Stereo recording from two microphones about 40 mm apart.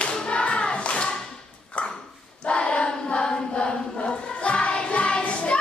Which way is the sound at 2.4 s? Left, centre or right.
Left.